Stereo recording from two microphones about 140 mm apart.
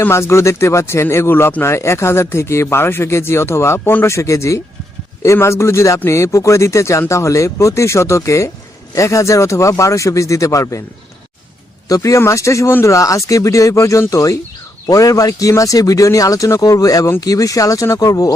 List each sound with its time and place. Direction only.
0.0 s speech: 20° left (ahead or behind)
11.9 s speech: 25° left (ahead or behind)